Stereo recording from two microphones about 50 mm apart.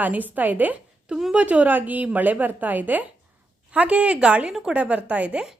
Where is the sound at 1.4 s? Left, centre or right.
Right.